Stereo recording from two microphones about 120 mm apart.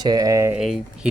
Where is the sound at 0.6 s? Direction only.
Centre (ahead or behind).